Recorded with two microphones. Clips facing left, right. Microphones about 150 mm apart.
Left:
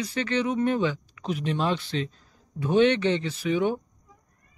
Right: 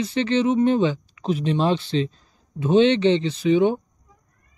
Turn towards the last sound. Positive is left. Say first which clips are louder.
# right 7 dB
turn(degrees=-25)  # may be behind; listen again after turning